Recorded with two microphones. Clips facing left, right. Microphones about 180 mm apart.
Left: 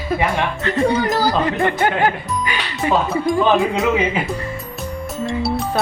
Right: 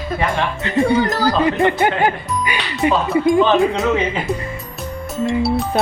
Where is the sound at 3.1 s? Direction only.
Centre (ahead or behind).